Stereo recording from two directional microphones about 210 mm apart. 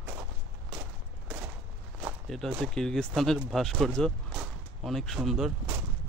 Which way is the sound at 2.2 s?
Centre (ahead or behind).